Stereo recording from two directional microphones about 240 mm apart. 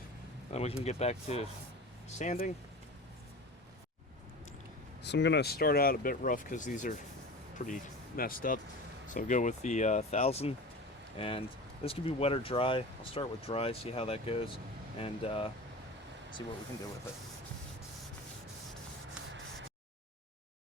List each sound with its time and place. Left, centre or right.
0.5 s speech: left
5.0 s speech: left